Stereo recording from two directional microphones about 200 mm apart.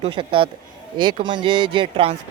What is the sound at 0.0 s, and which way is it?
Speech, 25° right (ahead or behind).